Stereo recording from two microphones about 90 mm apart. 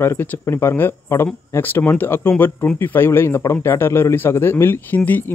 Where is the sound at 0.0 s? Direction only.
30° left (ahead or behind).